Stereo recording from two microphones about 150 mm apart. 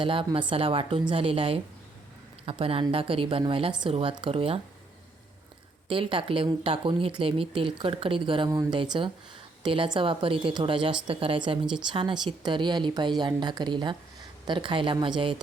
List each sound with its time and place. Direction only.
0.0 s speech: 35° right (ahead or behind)
5.9 s speech: 35° right (ahead or behind)
11.6 s speech: 5° right (ahead or behind)
11.9 s a woman's voice: 35° right (ahead or behind)